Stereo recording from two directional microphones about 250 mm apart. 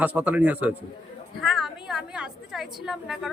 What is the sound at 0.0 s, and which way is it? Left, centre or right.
A woman's voice, centre.